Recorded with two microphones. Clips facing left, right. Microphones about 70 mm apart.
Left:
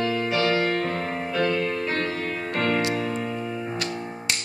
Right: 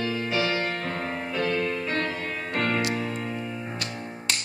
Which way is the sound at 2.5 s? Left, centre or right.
Centre.